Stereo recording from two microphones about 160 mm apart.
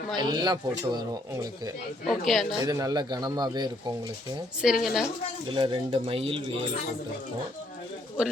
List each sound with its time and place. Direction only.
0.2 s a man's voice: 25° right (ahead or behind)
2.0 s speech: centre (ahead or behind)
2.6 s a man's voice: 20° right (ahead or behind)
4.6 s speech: centre (ahead or behind)
5.5 s speech: 30° right (ahead or behind)